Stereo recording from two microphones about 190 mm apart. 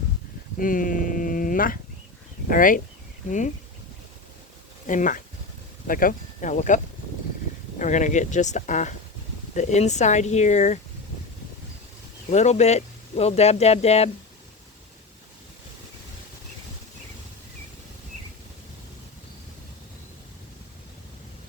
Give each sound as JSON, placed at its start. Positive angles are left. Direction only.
{"t": 0.6, "sound": "a sound", "side_deg": 45}
{"t": 2.5, "sound": "speech", "side_deg": 45}
{"t": 4.9, "sound": "speech", "side_deg": 45}
{"t": 12.3, "sound": "speech", "side_deg": 35}